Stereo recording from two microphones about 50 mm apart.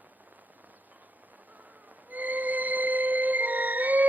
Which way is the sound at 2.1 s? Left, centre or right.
Right.